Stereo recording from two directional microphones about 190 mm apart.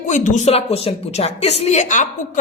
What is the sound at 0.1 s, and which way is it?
A woman's voice, 40° left (ahead or behind).